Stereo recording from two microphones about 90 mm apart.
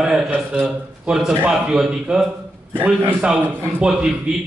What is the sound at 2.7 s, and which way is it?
Speech, 20° right (ahead or behind).